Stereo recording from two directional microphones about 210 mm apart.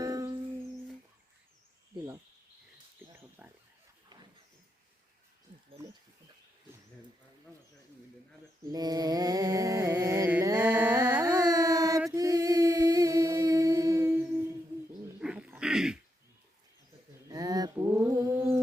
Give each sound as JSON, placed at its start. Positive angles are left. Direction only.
{"t": 0.0, "sound": "music", "side_deg": -15}
{"t": 3.2, "sound": "speech", "side_deg": -10}
{"t": 8.7, "sound": "a sound", "side_deg": -20}
{"t": 15.2, "sound": "dog", "side_deg": -5}
{"t": 17.2, "sound": "mantra", "side_deg": -15}